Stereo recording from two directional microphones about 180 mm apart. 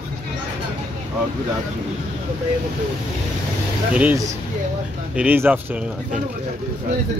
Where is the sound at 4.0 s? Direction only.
10° right (ahead or behind).